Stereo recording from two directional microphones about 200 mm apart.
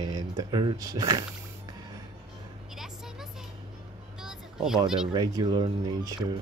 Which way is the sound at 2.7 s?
Centre (ahead or behind).